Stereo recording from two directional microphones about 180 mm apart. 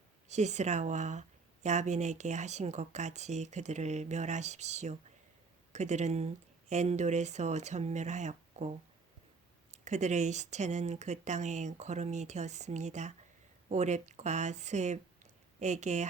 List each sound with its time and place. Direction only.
0.3 s speech: 40° right (ahead or behind)
9.7 s speech: 40° right (ahead or behind)